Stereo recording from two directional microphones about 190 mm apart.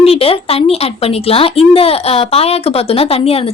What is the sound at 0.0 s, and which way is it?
A woman's voice, 30° left (ahead or behind).